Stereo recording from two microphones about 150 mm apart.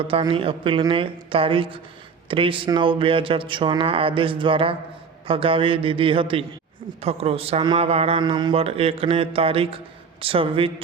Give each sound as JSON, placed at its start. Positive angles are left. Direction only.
{"t": 0.1, "sound": "a man's voice", "side_deg": -35}